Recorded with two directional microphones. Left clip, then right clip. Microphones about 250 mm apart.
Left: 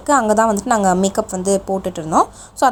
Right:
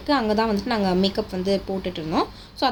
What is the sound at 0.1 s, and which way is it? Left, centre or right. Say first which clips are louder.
A woman's voice: left 8 dB; left.